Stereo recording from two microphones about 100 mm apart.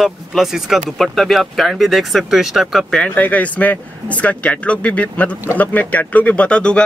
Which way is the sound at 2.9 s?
15° left (ahead or behind).